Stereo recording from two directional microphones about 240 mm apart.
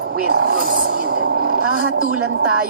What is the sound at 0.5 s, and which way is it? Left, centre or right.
Speech, right.